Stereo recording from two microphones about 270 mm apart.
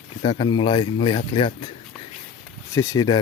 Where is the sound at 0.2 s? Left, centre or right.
Centre.